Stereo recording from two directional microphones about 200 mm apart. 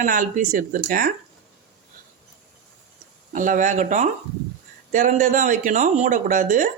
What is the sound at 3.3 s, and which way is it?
Speech, 40° right (ahead or behind).